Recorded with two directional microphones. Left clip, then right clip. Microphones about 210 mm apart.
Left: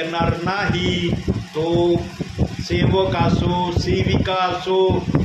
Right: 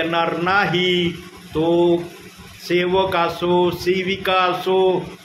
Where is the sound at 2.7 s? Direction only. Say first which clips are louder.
Right 2 dB; 35° right (ahead or behind).